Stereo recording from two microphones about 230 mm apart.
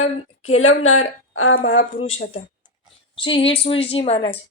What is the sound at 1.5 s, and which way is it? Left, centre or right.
Speech, left.